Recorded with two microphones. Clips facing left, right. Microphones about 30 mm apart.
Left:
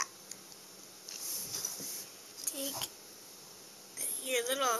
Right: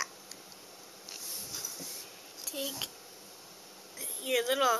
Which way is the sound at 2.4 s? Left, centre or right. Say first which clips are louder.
Right 3 dB; right.